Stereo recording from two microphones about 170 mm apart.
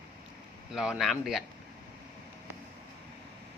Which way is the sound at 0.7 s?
5° right (ahead or behind).